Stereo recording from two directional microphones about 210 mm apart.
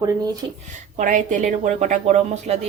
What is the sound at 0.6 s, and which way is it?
Speech, 35° right (ahead or behind).